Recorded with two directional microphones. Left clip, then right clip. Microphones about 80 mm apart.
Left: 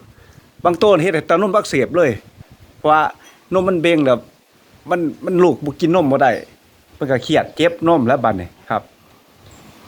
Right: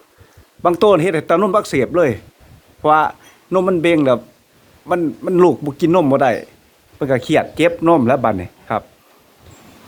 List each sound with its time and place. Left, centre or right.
0.6 s speech: right
2.8 s a sound: centre
3.6 s a man's voice: right
5.4 s speech: right